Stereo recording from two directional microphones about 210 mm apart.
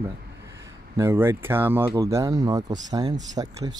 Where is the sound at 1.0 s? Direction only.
10° right (ahead or behind).